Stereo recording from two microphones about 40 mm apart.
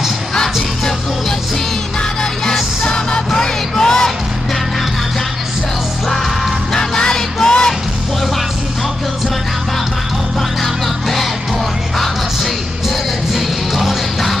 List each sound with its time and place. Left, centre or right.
2.8 s music: centre
3.3 s a sound: centre
6.0 s music: centre
10.6 s music: centre
13.3 s music: centre